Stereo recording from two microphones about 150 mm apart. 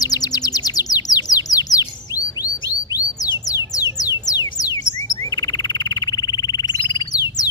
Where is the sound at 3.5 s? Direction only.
25° left (ahead or behind).